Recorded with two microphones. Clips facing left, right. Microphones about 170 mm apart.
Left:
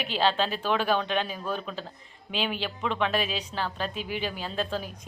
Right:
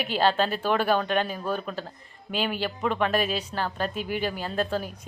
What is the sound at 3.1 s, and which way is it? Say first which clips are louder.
A woman's voice: right 3 dB; 45° right (ahead or behind).